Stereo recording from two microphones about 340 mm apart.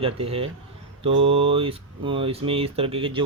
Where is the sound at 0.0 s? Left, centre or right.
Centre.